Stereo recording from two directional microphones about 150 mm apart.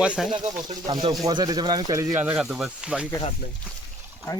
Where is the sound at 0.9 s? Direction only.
25° right (ahead or behind).